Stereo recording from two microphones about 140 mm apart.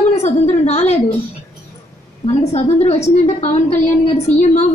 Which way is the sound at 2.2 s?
50° left (ahead or behind).